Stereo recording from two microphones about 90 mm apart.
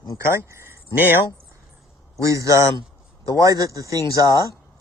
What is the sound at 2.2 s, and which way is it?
Speech, 40° right (ahead or behind).